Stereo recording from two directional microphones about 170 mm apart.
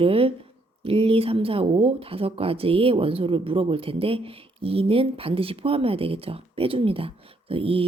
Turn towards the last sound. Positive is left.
turn(degrees=-35)  # may be behind; listen again after turning